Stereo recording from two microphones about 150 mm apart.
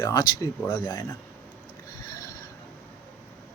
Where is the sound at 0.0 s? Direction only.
25° left (ahead or behind).